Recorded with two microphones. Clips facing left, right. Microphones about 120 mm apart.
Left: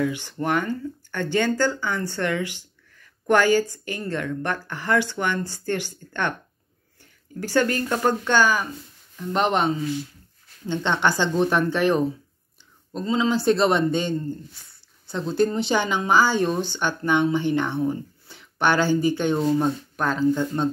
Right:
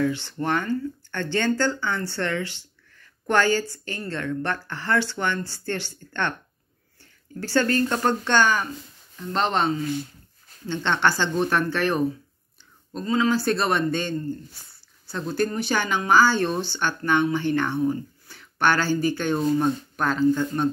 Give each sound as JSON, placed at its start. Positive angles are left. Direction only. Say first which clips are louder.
{"t": 0.0, "sound": "speech", "louder": "even", "side_deg": 15}